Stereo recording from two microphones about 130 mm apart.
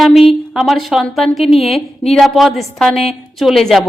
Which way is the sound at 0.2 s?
Centre (ahead or behind).